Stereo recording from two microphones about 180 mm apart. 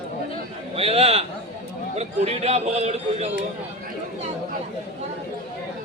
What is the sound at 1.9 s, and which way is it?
A man's voice, 35° right (ahead or behind).